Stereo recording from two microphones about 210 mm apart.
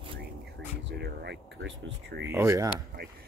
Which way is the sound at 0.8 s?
50° right (ahead or behind).